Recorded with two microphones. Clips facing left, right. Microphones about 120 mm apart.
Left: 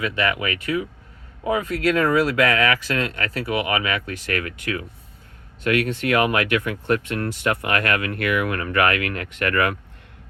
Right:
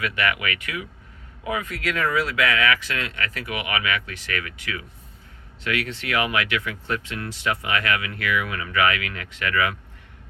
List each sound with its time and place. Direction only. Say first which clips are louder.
0.0 s speech: left 2 dB; 30° left (ahead or behind); by 9.7 s 55° left (ahead or behind)